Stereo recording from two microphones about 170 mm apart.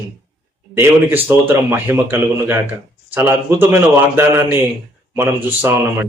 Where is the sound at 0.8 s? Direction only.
10° right (ahead or behind).